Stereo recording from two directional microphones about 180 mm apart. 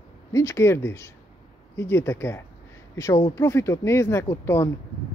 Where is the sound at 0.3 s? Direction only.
15° left (ahead or behind).